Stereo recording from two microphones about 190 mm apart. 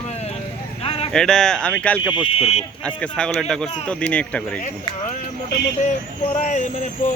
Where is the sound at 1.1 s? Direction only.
5° left (ahead or behind).